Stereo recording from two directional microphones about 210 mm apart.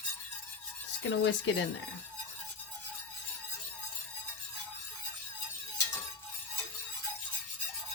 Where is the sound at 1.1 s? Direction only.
60° left (ahead or behind).